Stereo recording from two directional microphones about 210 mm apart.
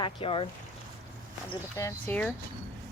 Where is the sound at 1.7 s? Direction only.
10° left (ahead or behind).